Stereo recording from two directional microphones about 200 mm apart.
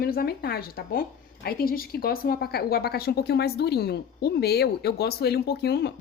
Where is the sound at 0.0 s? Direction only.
50° left (ahead or behind).